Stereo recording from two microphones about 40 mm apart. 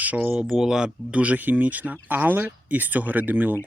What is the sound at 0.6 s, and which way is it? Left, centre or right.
Speech, centre.